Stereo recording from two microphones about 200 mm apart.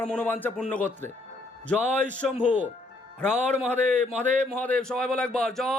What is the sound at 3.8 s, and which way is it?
Speech, 35° right (ahead or behind).